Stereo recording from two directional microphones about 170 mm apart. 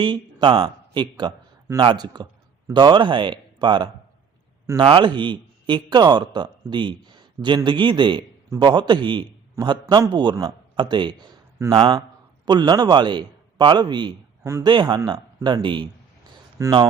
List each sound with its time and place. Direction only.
0.0 s a man's voice: 25° right (ahead or behind)